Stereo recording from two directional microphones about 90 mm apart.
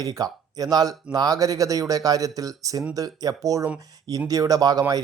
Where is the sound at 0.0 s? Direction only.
45° right (ahead or behind).